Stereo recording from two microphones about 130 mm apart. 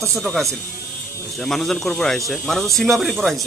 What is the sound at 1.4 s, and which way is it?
Speech, 5° left (ahead or behind).